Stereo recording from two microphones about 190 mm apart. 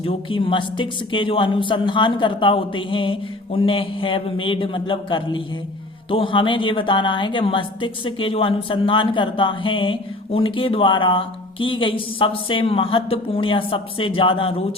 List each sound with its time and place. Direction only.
0.0 s a woman's voice: 30° left (ahead or behind)